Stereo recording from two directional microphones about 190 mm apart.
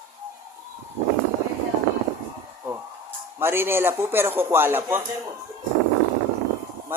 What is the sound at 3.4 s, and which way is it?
A woman's voice, 10° right (ahead or behind).